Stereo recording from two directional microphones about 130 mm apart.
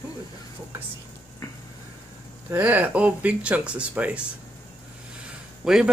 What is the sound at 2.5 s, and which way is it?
Speech, 15° right (ahead or behind).